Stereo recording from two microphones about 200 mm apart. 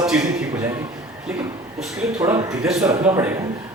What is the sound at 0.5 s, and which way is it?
Speech, 15° right (ahead or behind).